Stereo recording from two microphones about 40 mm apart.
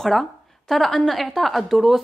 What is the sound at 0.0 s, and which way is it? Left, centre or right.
A woman's voice, centre.